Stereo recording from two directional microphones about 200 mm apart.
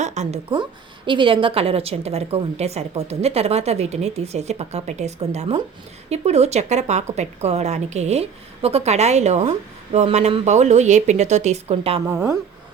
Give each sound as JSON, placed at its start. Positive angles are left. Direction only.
{"t": 0.0, "sound": "a woman's voice", "side_deg": -35}
{"t": 0.5, "sound": "a woman's voice", "side_deg": -25}
{"t": 12.0, "sound": "speech", "side_deg": -15}